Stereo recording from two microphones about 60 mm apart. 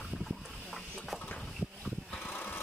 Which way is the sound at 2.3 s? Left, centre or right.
Left.